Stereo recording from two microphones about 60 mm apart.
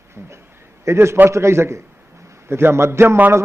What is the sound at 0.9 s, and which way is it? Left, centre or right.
A man's voice, right.